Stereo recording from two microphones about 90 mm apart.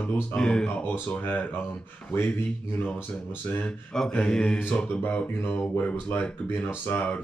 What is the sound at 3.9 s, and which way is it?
Mantra, 5° left (ahead or behind).